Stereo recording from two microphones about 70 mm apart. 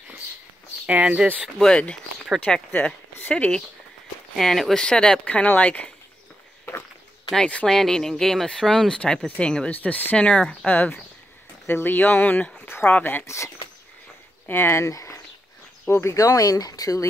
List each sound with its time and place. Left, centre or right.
0.8 s speech: centre
2.4 s speech: centre
4.4 s speech: centre; by 5.9 s left
7.3 s speech: centre
9.7 s speech: left
14.5 s speech: left
14.9 s speech: left